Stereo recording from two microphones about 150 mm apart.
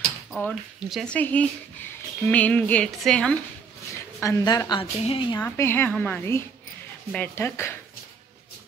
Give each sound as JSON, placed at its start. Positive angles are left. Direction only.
{"t": 0.3, "sound": "a woman's voice", "side_deg": 10}
{"t": 4.2, "sound": "a woman's voice", "side_deg": 20}
{"t": 5.4, "sound": "speech", "side_deg": 15}